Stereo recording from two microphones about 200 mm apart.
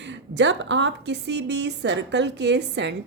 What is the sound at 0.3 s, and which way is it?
Speech, 65° right (ahead or behind).